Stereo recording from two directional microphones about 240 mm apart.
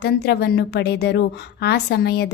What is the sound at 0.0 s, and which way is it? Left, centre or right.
A woman's voice, left.